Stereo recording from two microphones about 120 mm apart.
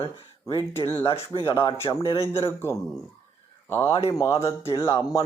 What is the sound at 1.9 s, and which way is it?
Speech, 40° left (ahead or behind).